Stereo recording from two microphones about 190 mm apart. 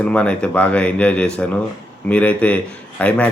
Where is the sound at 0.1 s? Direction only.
5° left (ahead or behind).